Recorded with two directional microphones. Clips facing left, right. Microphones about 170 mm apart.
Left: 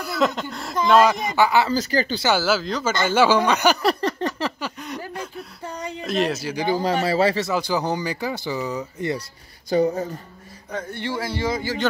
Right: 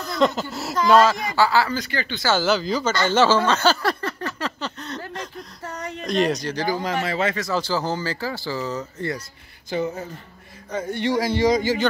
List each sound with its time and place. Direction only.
0.0 s speech: 5° left (ahead or behind)
1.0 s speech: 20° left (ahead or behind)
1.7 s speech: 35° left (ahead or behind)
2.2 s speech: 10° left (ahead or behind)
2.9 s speech: 15° left (ahead or behind)
6.7 s speech: 30° left (ahead or behind)
7.4 s speech: 10° left (ahead or behind)
9.7 s speech: 35° left (ahead or behind)
10.7 s a man's voice: 10° right (ahead or behind)